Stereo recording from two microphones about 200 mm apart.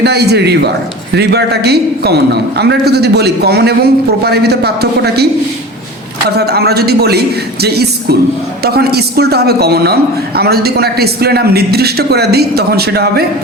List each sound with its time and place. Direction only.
0.0 s a man's voice: 55° right (ahead or behind)